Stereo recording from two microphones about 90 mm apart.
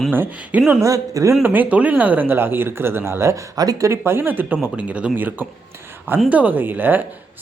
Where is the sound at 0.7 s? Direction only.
35° right (ahead or behind).